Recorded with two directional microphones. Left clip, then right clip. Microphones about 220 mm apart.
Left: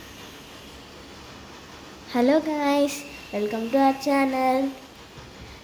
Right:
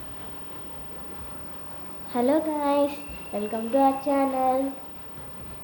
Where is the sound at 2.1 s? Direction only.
25° left (ahead or behind).